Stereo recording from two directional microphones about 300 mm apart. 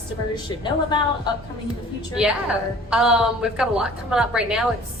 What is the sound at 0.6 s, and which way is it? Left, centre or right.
Speech, centre.